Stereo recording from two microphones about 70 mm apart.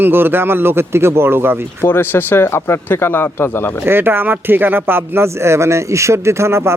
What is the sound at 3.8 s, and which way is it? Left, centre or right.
Speech, right.